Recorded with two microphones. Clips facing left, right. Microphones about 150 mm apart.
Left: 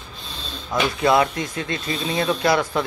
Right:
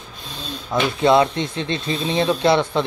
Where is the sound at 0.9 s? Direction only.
25° right (ahead or behind).